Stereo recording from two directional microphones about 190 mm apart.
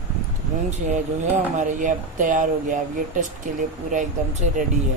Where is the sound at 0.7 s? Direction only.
40° right (ahead or behind).